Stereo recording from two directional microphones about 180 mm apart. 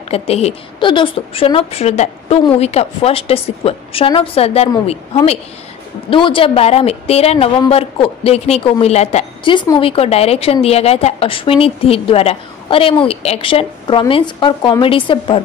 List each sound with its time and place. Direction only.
0.1 s a woman's voice: 35° left (ahead or behind)